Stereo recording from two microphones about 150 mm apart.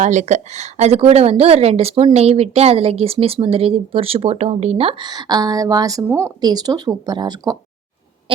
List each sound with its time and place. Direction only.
0.0 s a woman's voice: 55° right (ahead or behind); by 7.5 s 25° right (ahead or behind)